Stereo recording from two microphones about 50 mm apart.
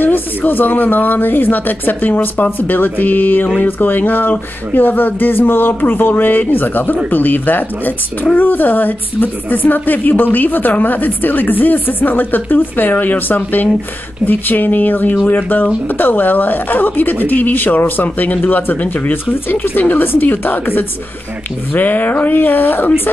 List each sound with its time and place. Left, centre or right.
0.0 s a woman's voice: left